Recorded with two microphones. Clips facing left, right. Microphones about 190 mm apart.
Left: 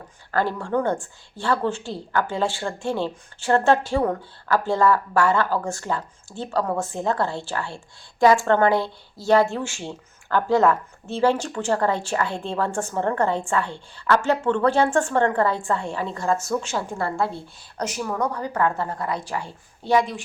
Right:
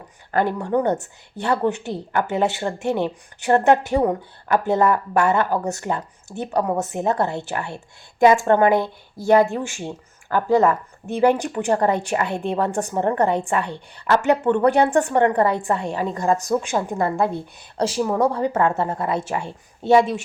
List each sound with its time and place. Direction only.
0.3 s a woman's voice: 20° right (ahead or behind)